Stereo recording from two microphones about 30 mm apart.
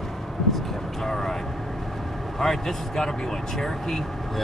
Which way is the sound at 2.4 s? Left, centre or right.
Centre.